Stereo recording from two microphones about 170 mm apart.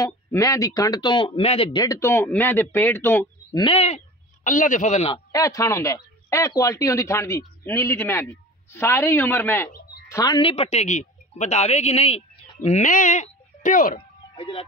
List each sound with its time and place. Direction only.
0.0 s speech: 20° left (ahead or behind); by 1.8 s 35° left (ahead or behind)
1.8 s speech: 20° left (ahead or behind)
3.5 s speech: 35° left (ahead or behind)
4.5 s a man's voice: 50° left (ahead or behind)
5.1 s speech: 20° left (ahead or behind); by 14.0 s 55° left (ahead or behind)
14.3 s speech: 35° left (ahead or behind)